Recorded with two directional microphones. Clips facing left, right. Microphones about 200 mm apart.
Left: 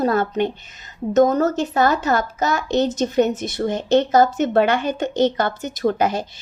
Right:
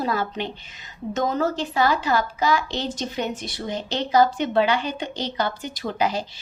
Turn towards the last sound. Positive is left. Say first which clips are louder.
# left 5 dB
turn(degrees=50)  # may be behind; listen again after turning